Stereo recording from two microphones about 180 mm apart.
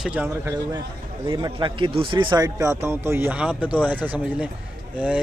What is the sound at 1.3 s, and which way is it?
Speech, 25° right (ahead or behind).